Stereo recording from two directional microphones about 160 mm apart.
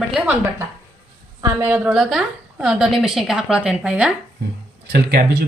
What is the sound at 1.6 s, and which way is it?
A woman's voice, 10° right (ahead or behind).